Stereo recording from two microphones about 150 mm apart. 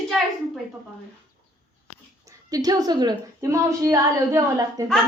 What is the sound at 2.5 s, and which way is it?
A woman's voice, 25° right (ahead or behind).